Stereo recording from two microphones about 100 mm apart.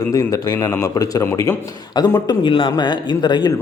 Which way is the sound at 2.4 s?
55° left (ahead or behind).